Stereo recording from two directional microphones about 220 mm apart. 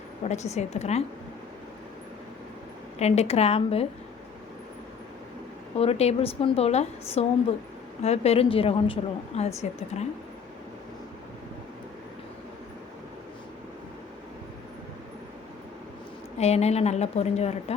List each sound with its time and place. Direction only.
0.3 s a woman's voice: 30° left (ahead or behind)
3.0 s a woman's voice: 30° left (ahead or behind)
5.7 s a woman's voice: 25° left (ahead or behind)
16.4 s a woman's voice: 30° left (ahead or behind)